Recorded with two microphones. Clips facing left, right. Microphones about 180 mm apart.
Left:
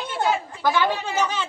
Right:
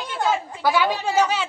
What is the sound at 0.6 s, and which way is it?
Speech, 10° right (ahead or behind).